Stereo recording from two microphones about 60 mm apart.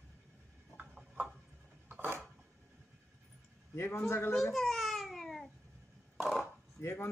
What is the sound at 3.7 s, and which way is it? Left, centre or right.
Speech, left.